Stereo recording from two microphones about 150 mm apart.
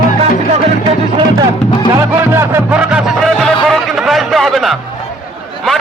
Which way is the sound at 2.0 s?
15° right (ahead or behind).